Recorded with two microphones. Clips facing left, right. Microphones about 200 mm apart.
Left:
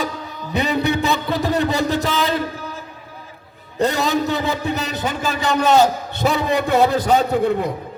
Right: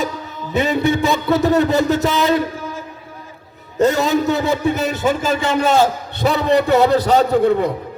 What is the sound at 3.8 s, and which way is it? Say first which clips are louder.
A man's voice: right 4 dB; 45° right (ahead or behind).